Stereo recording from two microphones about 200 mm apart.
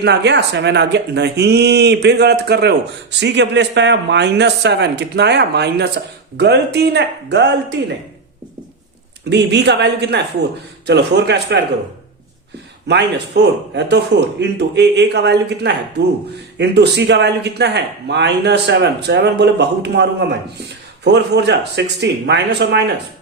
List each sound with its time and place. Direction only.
0.0 s speech: 60° right (ahead or behind)
9.3 s speech: 60° right (ahead or behind)
12.9 s speech: 55° right (ahead or behind)